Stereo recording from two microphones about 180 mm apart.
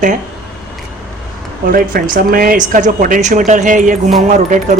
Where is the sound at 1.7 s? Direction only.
50° right (ahead or behind).